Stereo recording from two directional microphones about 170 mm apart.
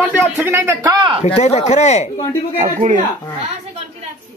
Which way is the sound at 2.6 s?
50° right (ahead or behind).